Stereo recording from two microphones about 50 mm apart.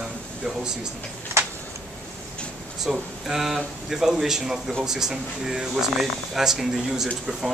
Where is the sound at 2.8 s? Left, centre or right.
Centre.